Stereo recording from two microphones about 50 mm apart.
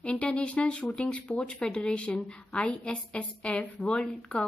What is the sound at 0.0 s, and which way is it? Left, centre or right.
A woman's voice, left.